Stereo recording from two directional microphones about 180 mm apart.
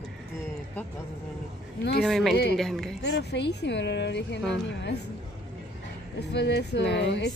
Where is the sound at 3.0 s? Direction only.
70° left (ahead or behind).